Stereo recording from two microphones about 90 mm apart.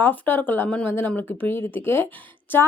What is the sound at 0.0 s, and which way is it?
A woman's voice, 20° left (ahead or behind).